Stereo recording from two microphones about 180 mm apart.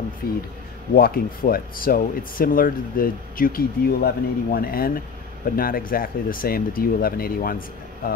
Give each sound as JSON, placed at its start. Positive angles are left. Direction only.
{"t": 0.2, "sound": "speech", "side_deg": 55}